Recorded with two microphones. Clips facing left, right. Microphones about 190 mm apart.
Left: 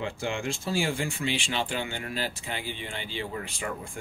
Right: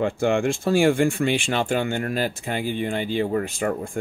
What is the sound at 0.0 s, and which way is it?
Speech, 55° right (ahead or behind).